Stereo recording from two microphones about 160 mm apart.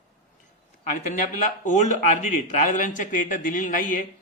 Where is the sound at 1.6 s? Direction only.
50° left (ahead or behind).